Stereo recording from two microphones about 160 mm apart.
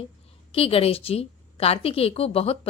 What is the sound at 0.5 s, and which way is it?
A woman's voice, 35° left (ahead or behind).